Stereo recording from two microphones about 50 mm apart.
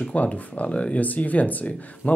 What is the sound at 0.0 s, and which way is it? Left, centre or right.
Speech, left.